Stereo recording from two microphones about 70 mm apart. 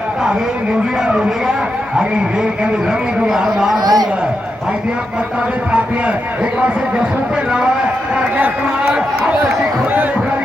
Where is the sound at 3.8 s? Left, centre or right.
Right.